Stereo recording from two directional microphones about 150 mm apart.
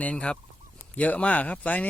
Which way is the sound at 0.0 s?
10° left (ahead or behind).